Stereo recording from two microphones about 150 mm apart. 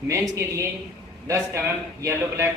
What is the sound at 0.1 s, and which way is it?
A man's voice, 20° right (ahead or behind).